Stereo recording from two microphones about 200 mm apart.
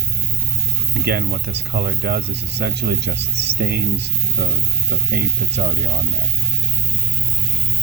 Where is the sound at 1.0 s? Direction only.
55° right (ahead or behind).